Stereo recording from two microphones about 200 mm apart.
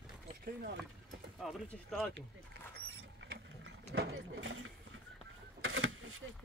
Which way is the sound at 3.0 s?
65° right (ahead or behind).